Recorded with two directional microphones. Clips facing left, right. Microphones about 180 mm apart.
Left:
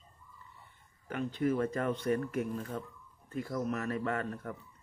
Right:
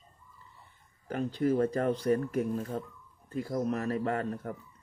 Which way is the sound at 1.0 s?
35° right (ahead or behind).